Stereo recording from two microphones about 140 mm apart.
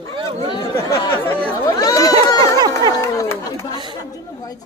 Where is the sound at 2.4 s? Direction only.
30° right (ahead or behind).